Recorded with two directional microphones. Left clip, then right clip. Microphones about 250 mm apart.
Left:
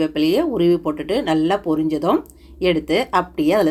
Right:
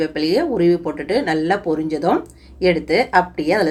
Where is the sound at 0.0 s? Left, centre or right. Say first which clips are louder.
Even; left.